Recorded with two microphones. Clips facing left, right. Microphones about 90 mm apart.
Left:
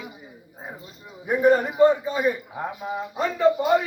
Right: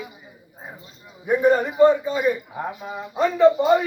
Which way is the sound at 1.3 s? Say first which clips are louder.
Right 1 dB; 5° left (ahead or behind).